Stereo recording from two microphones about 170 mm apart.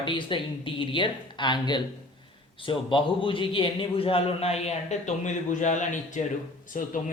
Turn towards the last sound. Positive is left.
turn(degrees=50)  # may be behind; listen again after turning